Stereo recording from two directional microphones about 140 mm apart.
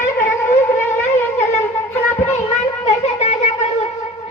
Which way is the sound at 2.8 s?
50° left (ahead or behind).